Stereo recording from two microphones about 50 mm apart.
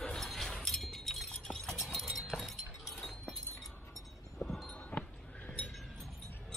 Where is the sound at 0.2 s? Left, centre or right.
Centre.